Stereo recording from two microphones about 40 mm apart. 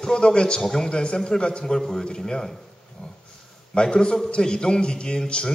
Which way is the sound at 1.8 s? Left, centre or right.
Centre.